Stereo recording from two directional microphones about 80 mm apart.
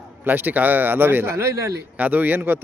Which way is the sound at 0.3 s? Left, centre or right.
Right.